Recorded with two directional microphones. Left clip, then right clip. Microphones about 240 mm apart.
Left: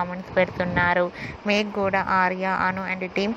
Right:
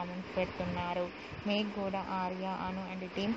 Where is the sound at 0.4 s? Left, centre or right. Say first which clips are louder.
Left 14 dB; left.